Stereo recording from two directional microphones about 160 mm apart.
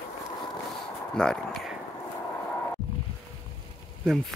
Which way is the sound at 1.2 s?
5° left (ahead or behind).